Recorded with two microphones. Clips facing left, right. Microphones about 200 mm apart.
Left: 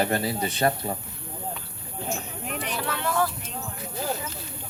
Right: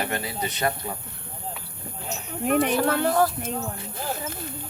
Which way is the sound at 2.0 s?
45° right (ahead or behind).